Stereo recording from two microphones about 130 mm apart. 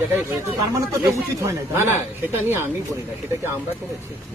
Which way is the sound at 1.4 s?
20° right (ahead or behind).